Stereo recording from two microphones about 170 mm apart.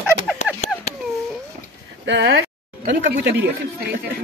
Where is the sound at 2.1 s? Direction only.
90° right.